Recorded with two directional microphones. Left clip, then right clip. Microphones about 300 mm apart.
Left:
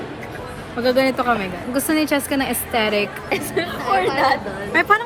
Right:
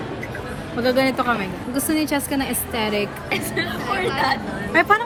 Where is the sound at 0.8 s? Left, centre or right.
Centre.